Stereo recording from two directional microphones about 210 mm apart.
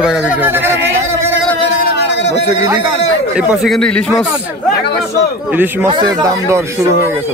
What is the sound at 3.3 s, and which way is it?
Speech, 5° right (ahead or behind).